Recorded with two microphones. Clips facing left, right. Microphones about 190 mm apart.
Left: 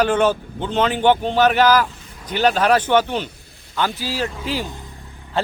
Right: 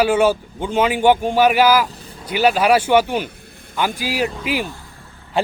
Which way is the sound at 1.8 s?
35° right (ahead or behind).